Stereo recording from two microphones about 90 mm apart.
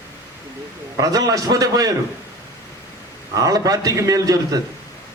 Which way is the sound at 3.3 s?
40° right (ahead or behind).